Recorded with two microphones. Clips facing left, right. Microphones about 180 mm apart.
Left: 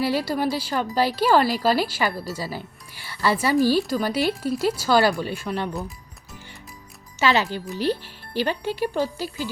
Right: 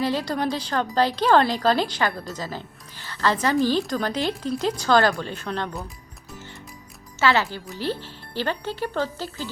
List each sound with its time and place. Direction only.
0.0 s speech: 10° left (ahead or behind)
7.2 s speech: 15° left (ahead or behind)